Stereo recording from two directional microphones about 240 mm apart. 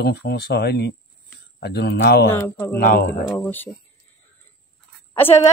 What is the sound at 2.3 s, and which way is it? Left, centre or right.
Speech, centre.